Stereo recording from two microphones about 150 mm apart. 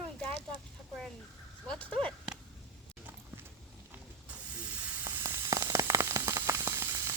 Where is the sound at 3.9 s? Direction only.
10° right (ahead or behind).